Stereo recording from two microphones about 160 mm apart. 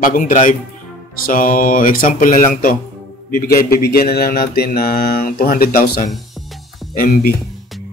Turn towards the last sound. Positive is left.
turn(degrees=65)  # may be behind; listen again after turning